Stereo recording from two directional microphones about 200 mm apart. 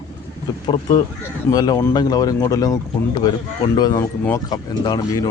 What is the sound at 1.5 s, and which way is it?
Speech, 20° left (ahead or behind).